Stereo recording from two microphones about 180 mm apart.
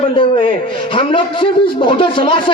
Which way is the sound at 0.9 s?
30° left (ahead or behind).